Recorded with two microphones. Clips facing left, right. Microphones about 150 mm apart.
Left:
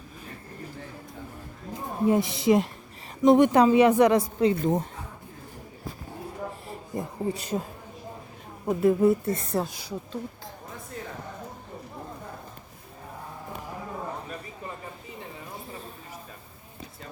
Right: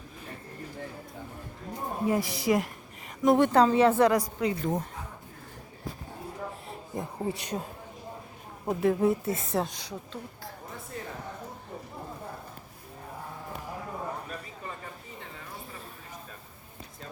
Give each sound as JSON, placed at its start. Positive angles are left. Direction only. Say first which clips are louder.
{"t": 2.0, "sound": "a woman's voice", "louder": "left 5 dB", "side_deg": 25}
{"t": 6.7, "sound": "speech", "louder": "left 2 dB", "side_deg": 0}
{"t": 8.6, "sound": "a woman's voice", "louder": "left 4 dB", "side_deg": 0}